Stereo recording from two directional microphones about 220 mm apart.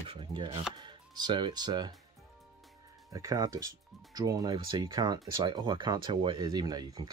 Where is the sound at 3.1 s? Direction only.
15° right (ahead or behind).